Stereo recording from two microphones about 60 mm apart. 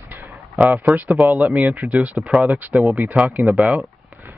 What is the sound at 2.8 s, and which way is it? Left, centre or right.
Speech, right.